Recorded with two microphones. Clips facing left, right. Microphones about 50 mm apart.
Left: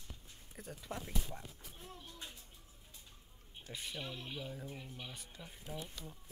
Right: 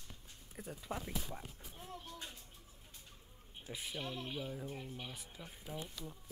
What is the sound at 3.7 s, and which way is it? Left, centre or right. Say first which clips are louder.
Speech: right 1 dB; centre.